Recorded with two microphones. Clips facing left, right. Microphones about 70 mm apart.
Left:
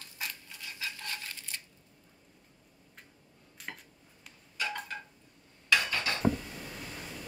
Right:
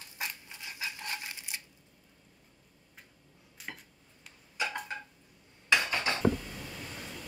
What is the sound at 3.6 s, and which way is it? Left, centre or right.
Dishes, centre.